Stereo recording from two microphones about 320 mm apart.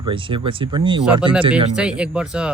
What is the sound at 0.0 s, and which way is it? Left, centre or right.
Speech, centre.